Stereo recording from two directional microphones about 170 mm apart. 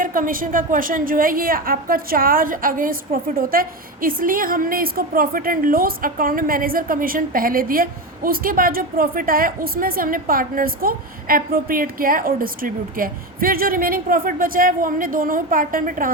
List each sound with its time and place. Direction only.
0.0 s a woman's voice: 55° right (ahead or behind)